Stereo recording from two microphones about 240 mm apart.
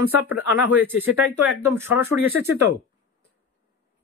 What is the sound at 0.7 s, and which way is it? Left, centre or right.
Speech, centre.